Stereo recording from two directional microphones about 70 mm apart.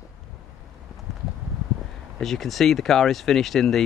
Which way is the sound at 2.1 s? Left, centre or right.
Centre.